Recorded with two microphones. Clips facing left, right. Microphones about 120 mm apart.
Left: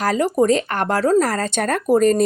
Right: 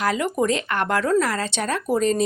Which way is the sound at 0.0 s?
35° left (ahead or behind).